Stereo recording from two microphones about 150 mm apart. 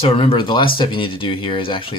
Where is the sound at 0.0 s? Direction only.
40° left (ahead or behind).